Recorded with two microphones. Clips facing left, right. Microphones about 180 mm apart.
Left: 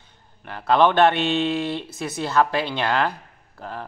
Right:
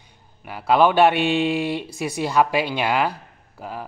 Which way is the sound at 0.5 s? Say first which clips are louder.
Right 1 dB; 10° right (ahead or behind).